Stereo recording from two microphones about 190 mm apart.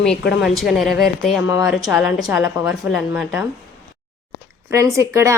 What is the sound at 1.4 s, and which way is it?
Speech, 15° right (ahead or behind).